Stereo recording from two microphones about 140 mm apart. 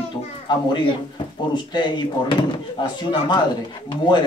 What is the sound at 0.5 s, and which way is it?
Speech, 35° left (ahead or behind).